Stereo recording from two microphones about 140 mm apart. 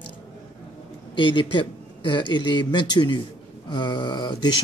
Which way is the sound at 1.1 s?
35° left (ahead or behind).